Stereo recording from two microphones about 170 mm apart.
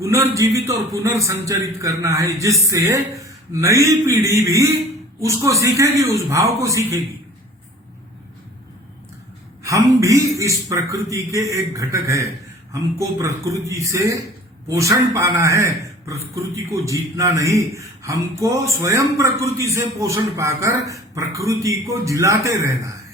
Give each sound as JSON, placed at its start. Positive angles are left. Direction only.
{"t": 0.0, "sound": "a man's voice", "side_deg": -15}
{"t": 9.6, "sound": "a man's voice", "side_deg": -20}